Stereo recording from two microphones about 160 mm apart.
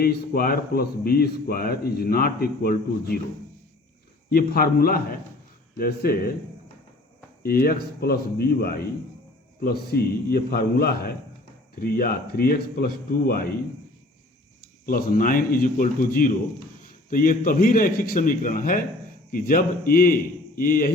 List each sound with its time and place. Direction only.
0.0 s speech: 70° left (ahead or behind)
4.3 s speech: 75° left (ahead or behind)
7.4 s speech: 70° left (ahead or behind)
9.6 s speech: 85° left
14.8 s a man's voice: 60° left (ahead or behind)